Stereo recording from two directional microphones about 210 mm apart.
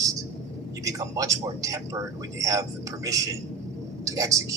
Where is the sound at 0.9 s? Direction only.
15° right (ahead or behind).